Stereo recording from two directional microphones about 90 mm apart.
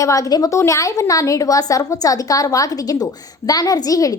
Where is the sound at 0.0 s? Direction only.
40° left (ahead or behind).